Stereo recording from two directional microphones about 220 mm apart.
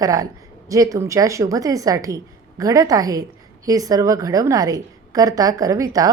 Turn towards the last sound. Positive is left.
turn(degrees=-15)  # may be behind; listen again after turning